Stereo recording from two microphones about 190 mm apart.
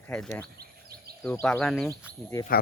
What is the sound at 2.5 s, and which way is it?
Speech, 50° left (ahead or behind).